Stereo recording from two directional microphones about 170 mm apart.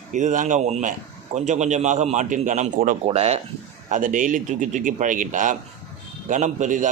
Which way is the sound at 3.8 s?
50° right (ahead or behind).